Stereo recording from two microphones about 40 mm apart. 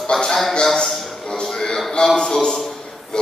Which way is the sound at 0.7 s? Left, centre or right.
Centre.